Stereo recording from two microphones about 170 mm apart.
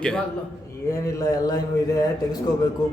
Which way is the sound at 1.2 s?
20° left (ahead or behind).